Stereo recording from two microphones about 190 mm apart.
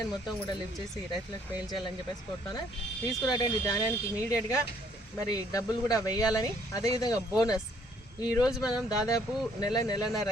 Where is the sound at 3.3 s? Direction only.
20° left (ahead or behind).